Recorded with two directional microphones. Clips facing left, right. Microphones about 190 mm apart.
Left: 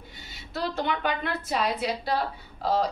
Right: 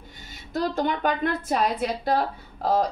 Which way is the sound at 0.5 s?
45° right (ahead or behind).